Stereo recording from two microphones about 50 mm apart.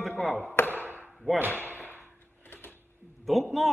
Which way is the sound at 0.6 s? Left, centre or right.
Left.